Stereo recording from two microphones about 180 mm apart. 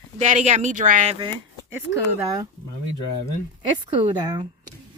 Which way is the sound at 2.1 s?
20° right (ahead or behind).